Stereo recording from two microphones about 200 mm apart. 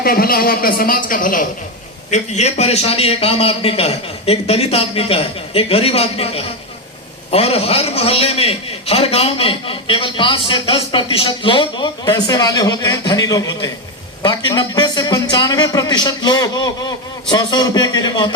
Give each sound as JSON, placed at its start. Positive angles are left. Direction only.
{"t": 0.0, "sound": "a woman's voice", "side_deg": 50}